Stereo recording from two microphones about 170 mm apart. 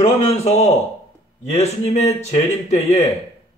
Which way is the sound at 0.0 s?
40° left (ahead or behind).